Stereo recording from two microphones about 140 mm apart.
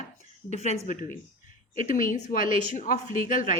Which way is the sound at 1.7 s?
65° left (ahead or behind).